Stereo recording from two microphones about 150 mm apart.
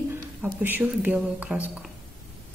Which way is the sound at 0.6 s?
10° right (ahead or behind).